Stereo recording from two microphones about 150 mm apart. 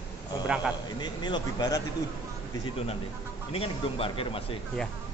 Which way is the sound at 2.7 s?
40° left (ahead or behind).